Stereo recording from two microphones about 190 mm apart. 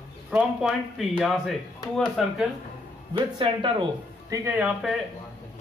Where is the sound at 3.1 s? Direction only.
25° right (ahead or behind).